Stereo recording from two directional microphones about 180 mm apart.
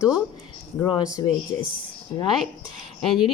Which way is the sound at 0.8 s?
20° left (ahead or behind).